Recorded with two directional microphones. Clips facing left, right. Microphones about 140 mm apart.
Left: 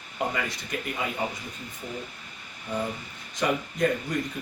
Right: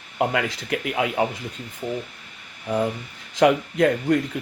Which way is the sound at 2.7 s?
75° right (ahead or behind).